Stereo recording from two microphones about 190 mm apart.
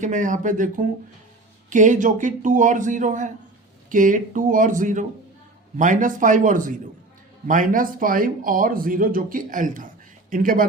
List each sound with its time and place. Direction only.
0.0 s speech: 40° right (ahead or behind)